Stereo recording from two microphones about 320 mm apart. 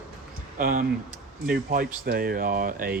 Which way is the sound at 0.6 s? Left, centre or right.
Right.